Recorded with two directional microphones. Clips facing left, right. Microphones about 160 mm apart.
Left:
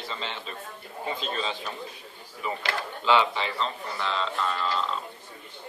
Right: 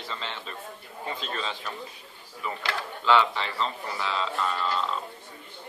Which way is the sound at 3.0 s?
15° left (ahead or behind).